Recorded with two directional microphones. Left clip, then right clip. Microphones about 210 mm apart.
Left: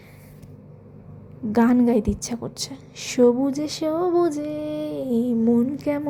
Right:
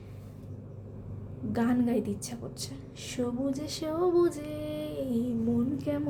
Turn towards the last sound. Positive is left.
turn(degrees=30)  # may be behind; listen again after turning